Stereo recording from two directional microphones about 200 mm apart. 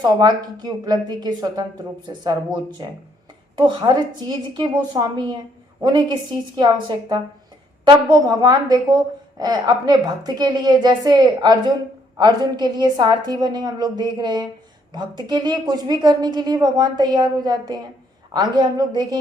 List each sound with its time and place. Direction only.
0.0 s a woman's voice: 20° right (ahead or behind)